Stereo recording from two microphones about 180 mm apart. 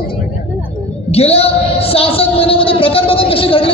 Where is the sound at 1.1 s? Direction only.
35° left (ahead or behind).